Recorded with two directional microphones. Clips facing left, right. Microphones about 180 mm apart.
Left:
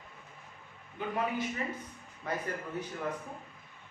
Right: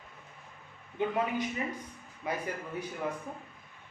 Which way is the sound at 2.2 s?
10° right (ahead or behind).